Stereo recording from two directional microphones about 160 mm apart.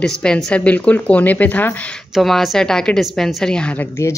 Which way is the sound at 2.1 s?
Centre (ahead or behind).